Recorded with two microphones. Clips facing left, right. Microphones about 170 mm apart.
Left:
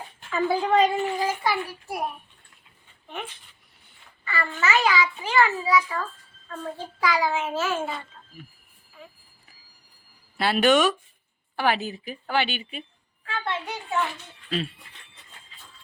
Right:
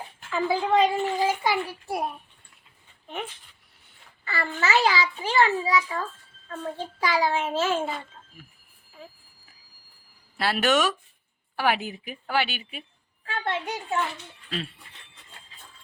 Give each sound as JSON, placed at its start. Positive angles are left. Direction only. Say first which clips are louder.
{"t": 0.3, "sound": "speech", "louder": "left 1 dB", "side_deg": 0}
{"t": 1.2, "sound": "a woman's voice", "louder": "right 1 dB", "side_deg": -15}
{"t": 4.3, "sound": "a child's voice", "louder": "even", "side_deg": -30}
{"t": 10.3, "sound": "a woman's voice", "louder": "left 3 dB", "side_deg": 0}
{"t": 13.2, "sound": "a child's voice", "louder": "right 1 dB", "side_deg": -40}